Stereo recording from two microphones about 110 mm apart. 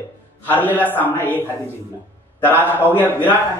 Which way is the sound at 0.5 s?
15° left (ahead or behind).